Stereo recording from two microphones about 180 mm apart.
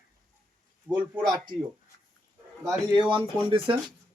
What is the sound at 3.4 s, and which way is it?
Speech, 30° right (ahead or behind).